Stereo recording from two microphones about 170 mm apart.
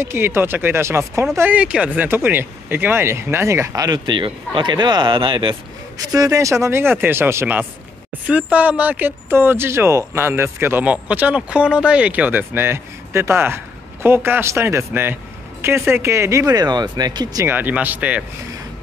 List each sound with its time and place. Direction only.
0.0 s speech: 15° right (ahead or behind)